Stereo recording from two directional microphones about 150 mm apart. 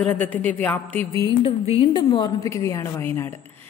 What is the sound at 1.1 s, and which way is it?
Speech, 20° left (ahead or behind).